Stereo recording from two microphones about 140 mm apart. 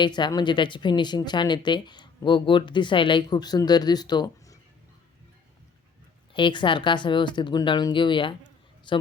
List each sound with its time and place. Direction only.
0.0 s speech: 30° left (ahead or behind)
6.3 s speech: 35° left (ahead or behind)